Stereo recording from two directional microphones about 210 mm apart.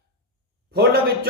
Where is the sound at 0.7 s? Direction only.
45° right (ahead or behind).